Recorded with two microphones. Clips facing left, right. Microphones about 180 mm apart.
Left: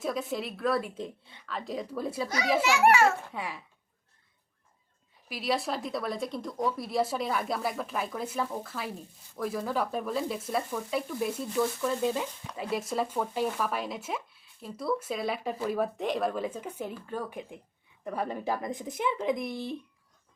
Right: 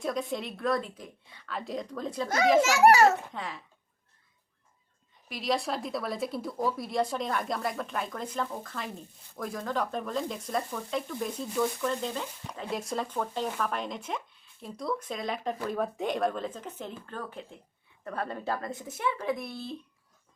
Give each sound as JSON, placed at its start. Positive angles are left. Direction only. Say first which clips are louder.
{"t": 0.0, "sound": "speech", "louder": "even", "side_deg": 0}
{"t": 0.9, "sound": "speech", "louder": "left 8 dB", "side_deg": 25}
{"t": 1.5, "sound": "speech", "louder": "even", "side_deg": 0}
{"t": 2.6, "sound": "a child's voice", "louder": "right 2 dB", "side_deg": -40}
{"t": 3.3, "sound": "speech", "louder": "left 1 dB", "side_deg": 10}
{"t": 5.3, "sound": "speech", "louder": "even", "side_deg": 0}